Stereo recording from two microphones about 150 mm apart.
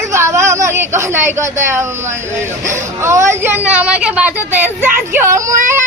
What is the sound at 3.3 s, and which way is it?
A woman's voice, 15° right (ahead or behind).